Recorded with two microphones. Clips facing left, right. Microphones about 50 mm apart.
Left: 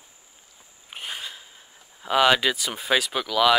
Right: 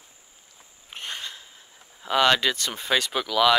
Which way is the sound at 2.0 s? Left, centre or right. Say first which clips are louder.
Left 1 dB; centre.